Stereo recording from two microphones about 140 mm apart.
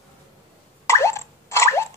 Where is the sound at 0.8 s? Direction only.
20° left (ahead or behind).